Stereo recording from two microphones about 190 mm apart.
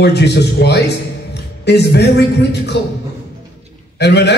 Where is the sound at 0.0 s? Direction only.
65° left (ahead or behind).